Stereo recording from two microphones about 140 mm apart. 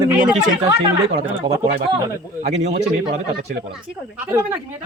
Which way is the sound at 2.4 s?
60° right (ahead or behind).